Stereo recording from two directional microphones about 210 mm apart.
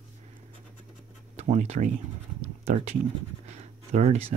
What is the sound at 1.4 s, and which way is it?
Speech, 30° right (ahead or behind).